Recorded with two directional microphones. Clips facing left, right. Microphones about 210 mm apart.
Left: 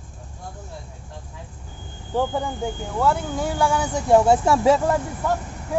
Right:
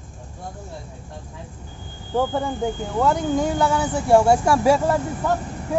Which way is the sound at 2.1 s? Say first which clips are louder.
Right 1 dB; 10° left (ahead or behind).